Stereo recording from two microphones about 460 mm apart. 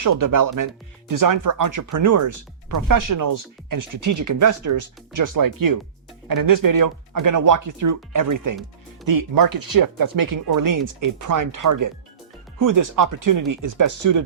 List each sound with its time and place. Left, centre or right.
0.0 s speech: right